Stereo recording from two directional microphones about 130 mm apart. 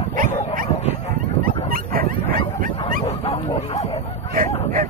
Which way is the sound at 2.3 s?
90° right.